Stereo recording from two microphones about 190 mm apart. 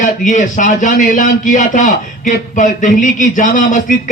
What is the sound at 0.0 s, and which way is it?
A man's voice, 40° left (ahead or behind).